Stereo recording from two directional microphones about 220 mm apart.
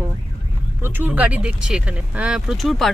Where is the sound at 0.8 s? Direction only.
10° right (ahead or behind).